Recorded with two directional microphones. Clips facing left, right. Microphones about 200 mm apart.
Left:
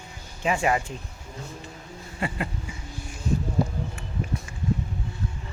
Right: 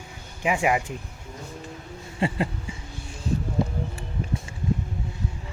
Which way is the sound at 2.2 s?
30° right (ahead or behind).